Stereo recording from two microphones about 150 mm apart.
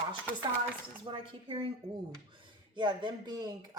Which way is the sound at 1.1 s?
35° right (ahead or behind).